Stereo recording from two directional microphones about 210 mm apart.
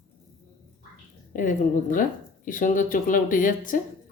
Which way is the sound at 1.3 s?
40° left (ahead or behind).